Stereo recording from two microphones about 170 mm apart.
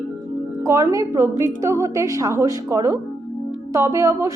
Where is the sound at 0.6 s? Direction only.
15° right (ahead or behind).